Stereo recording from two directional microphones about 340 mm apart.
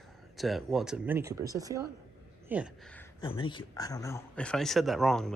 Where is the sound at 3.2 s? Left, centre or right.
Centre.